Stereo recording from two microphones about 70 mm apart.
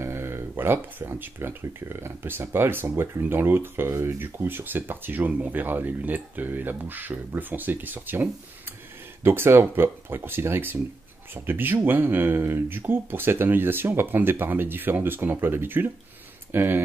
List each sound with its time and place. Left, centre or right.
0.0 s speech: right